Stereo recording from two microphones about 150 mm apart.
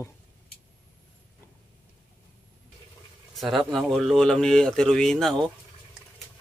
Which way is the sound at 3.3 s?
Centre (ahead or behind).